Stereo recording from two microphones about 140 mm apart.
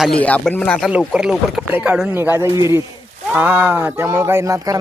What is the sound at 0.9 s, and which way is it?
A man's voice, 5° right (ahead or behind).